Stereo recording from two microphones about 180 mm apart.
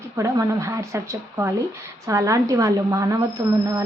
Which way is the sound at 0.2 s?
15° right (ahead or behind).